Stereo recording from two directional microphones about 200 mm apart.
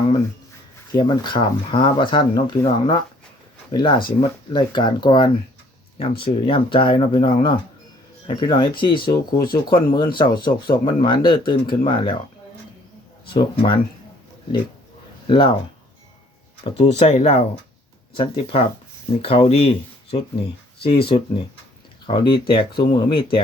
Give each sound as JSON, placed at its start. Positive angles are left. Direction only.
{"t": 0.9, "sound": "speech", "side_deg": 20}
{"t": 13.3, "sound": "speech", "side_deg": 25}
{"t": 15.3, "sound": "speech", "side_deg": 25}
{"t": 16.7, "sound": "speech", "side_deg": 30}